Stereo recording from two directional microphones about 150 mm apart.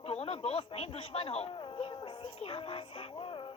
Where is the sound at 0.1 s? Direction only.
45° left (ahead or behind).